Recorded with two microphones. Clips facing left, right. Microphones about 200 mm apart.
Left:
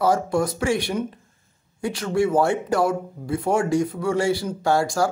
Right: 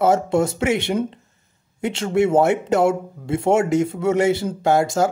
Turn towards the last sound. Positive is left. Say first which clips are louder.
# right 3 dB
turn(degrees=-20)  # may be behind; listen again after turning